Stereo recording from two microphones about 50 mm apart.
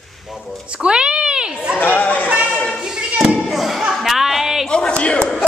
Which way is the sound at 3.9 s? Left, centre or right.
Centre.